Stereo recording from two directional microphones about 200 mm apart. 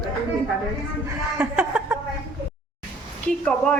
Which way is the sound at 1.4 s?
10° right (ahead or behind).